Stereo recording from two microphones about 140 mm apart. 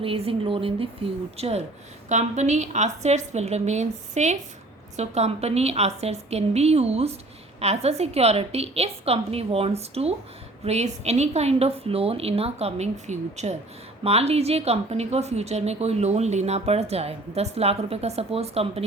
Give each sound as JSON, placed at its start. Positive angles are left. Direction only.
{"t": 0.0, "sound": "a woman's voice", "side_deg": -40}